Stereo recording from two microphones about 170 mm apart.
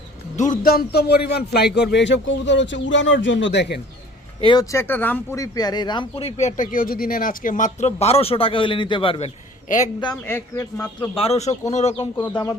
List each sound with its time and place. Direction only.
0.3 s a man's voice: 50° left (ahead or behind); by 3.8 s 90° left
4.4 s speech: 30° left (ahead or behind)
4.7 s speech: 15° left (ahead or behind); by 9.3 s 35° left (ahead or behind)
9.7 s a man's voice: 50° left (ahead or behind)
10.2 s speech: 15° left (ahead or behind)
11.1 s speech: 35° left (ahead or behind)